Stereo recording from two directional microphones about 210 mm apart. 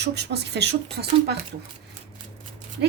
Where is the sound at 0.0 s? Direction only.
55° right (ahead or behind).